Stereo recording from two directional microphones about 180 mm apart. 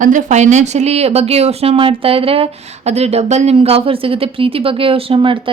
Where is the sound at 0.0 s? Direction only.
45° right (ahead or behind).